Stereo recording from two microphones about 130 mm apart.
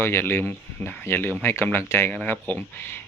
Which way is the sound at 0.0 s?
15° left (ahead or behind).